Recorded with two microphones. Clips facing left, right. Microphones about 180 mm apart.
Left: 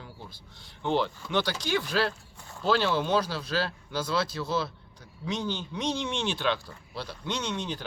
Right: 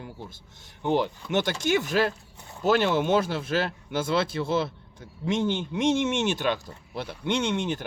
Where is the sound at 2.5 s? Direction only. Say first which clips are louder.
Right 3 dB; 20° right (ahead or behind).